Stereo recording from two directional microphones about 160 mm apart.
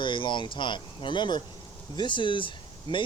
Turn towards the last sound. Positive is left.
turn(degrees=30)  # may be behind; listen again after turning